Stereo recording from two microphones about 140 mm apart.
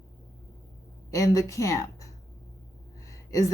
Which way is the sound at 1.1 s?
25° left (ahead or behind).